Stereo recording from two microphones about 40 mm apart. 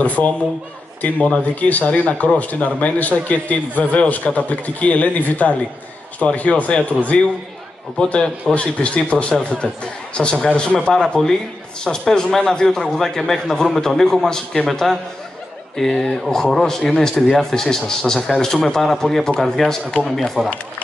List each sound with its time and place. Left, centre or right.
0.0 s speech: left
8.0 s speech: left
10.9 s speech: centre
12.9 s speech: centre
13.7 s speech: centre
15.7 s speech: centre